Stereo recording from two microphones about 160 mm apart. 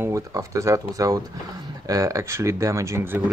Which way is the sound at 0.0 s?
20° right (ahead or behind).